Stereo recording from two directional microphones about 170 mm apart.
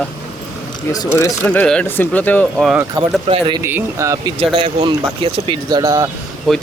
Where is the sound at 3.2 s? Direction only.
30° right (ahead or behind).